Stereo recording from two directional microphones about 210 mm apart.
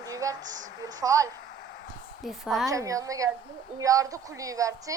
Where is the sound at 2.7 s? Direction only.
15° right (ahead or behind).